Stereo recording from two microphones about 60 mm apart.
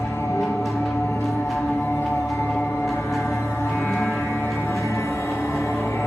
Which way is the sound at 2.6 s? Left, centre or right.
Left.